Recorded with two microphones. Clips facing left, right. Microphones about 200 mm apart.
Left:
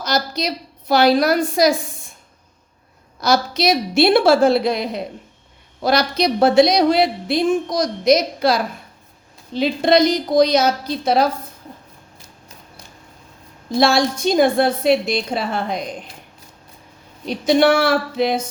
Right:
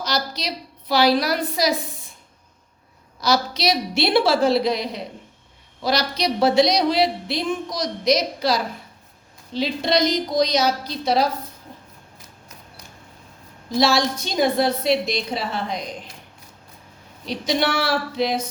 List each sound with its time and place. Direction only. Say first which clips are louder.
0.0 s a woman's voice: left 5 dB; 50° left (ahead or behind)
3.2 s a woman's voice: left 3 dB; 50° left (ahead or behind)
13.7 s a woman's voice: left 3 dB; 50° left (ahead or behind)
17.2 s a woman's voice: left 8 dB; 50° left (ahead or behind)